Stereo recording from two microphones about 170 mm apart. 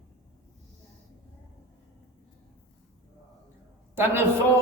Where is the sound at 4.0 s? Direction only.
15° right (ahead or behind).